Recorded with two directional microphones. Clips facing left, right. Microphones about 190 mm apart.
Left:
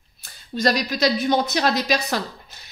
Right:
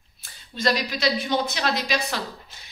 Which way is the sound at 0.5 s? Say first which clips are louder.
Left 3 dB; 40° left (ahead or behind).